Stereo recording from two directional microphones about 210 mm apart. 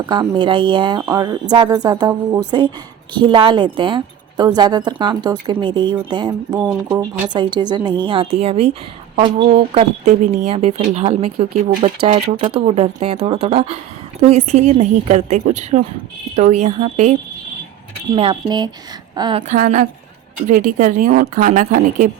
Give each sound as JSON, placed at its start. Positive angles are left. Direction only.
{"t": 0.0, "sound": "a woman's voice", "side_deg": -20}
{"t": 6.5, "sound": "speech", "side_deg": -5}
{"t": 6.8, "sound": "a woman's voice", "side_deg": -15}
{"t": 19.4, "sound": "speech", "side_deg": -35}